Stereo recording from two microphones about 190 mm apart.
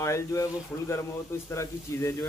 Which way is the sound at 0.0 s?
15° left (ahead or behind).